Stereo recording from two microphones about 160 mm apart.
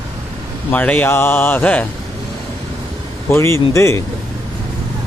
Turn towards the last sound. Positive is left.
turn(degrees=15)  # may be behind; listen again after turning